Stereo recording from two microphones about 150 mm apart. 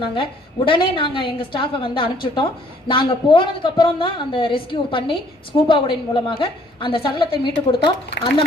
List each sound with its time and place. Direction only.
0.0 s a woman's voice: 35° left (ahead or behind)